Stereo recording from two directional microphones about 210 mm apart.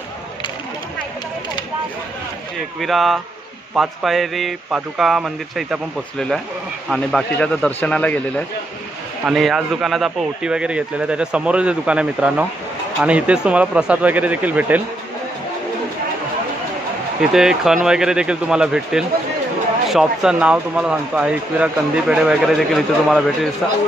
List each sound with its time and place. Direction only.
2.8 s speech: centre (ahead or behind)
17.2 s speech: centre (ahead or behind)